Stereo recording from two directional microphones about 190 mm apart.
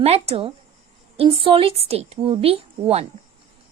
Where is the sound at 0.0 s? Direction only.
30° right (ahead or behind).